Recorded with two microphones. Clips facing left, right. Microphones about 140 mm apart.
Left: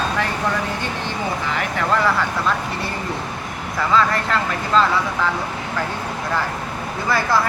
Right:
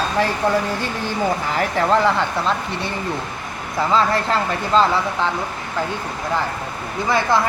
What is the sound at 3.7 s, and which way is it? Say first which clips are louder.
Speech: right 1 dB; 30° right (ahead or behind).